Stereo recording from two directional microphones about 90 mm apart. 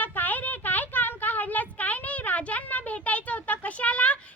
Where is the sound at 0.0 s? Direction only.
20° left (ahead or behind).